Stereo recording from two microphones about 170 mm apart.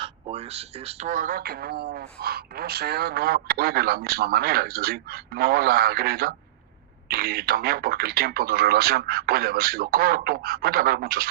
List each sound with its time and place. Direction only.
0.0 s speech: 35° right (ahead or behind); by 11.3 s 65° right (ahead or behind)